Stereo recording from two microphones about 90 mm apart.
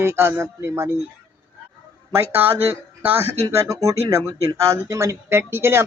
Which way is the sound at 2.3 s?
25° right (ahead or behind).